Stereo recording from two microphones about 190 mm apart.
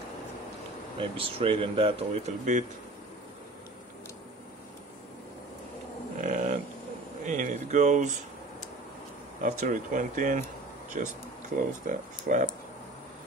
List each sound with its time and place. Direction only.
0.9 s speech: 30° right (ahead or behind)
6.2 s livestock: 45° right (ahead or behind)
7.2 s a sound: 40° right (ahead or behind)
9.4 s speech: 45° right (ahead or behind)